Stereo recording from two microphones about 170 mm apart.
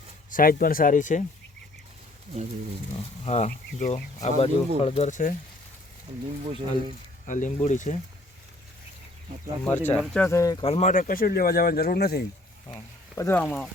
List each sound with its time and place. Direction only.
0.3 s speech: 55° left (ahead or behind)
3.2 s speech: 40° left (ahead or behind)
6.4 s speech: 30° right (ahead or behind)
7.3 s speech: 50° left (ahead or behind)
9.6 s speech: 10° left (ahead or behind)
10.6 s speech: 40° left (ahead or behind); by 12.2 s 70° left (ahead or behind)
12.6 s speech: 20° left (ahead or behind)